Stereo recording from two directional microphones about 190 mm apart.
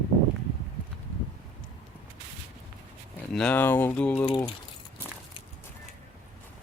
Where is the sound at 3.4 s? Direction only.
10° left (ahead or behind).